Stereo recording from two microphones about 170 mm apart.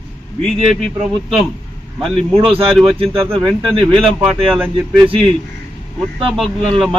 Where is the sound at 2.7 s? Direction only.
Centre (ahead or behind).